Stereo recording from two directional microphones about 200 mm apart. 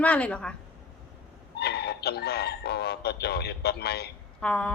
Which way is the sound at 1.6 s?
55° left (ahead or behind).